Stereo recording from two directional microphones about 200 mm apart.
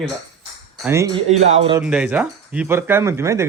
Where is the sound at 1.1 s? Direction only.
35° right (ahead or behind).